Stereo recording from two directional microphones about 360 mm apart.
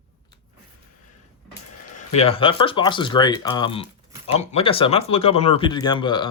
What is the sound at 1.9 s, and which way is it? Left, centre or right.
Speech, centre.